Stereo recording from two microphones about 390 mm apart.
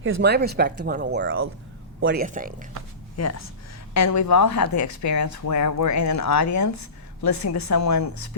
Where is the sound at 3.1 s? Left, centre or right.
Left.